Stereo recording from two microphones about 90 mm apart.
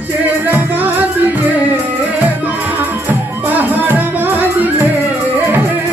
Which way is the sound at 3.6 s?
20° right (ahead or behind).